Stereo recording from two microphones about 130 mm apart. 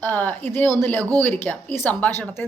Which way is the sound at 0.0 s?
15° left (ahead or behind).